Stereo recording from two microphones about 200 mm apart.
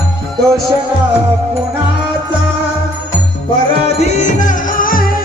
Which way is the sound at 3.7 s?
35° left (ahead or behind).